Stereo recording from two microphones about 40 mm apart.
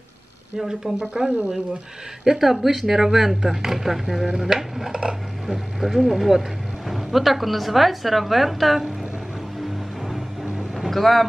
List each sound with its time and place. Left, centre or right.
0.6 s speech: centre
2.2 s a woman's voice: centre
10.9 s speech: centre